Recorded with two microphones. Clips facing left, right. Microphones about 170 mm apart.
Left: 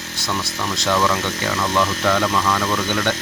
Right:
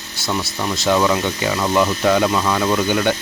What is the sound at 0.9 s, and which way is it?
Speech, 15° right (ahead or behind).